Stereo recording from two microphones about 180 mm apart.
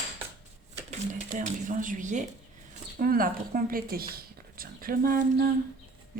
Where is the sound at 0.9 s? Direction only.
45° right (ahead or behind).